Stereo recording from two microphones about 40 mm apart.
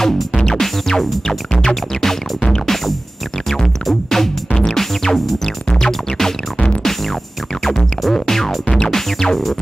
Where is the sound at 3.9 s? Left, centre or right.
Centre.